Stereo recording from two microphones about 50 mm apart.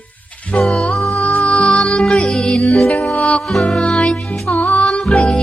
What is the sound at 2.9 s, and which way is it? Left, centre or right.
Music, left.